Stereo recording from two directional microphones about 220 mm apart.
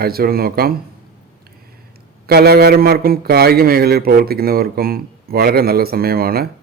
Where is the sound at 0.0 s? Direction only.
45° right (ahead or behind).